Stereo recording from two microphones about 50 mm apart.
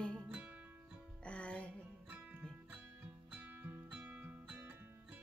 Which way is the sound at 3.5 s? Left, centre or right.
Right.